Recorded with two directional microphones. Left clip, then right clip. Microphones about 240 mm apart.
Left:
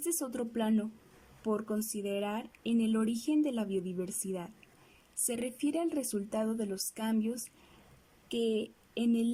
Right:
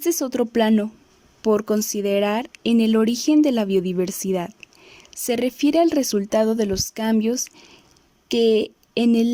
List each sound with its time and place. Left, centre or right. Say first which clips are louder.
0.0 s speech: right 14 dB; right